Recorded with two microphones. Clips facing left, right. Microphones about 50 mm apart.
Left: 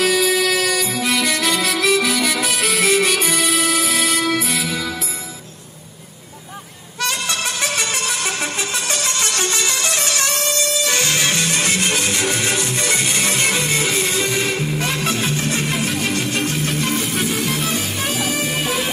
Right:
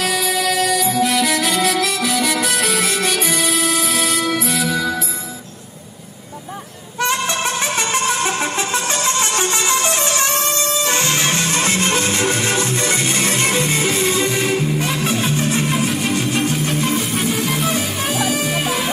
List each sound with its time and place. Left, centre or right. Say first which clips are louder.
0.0 s music: left 2 dB; centre
7.0 s music: right 4 dB; right
14.0 s music: right 2 dB; centre
14.9 s music: right 1 dB; centre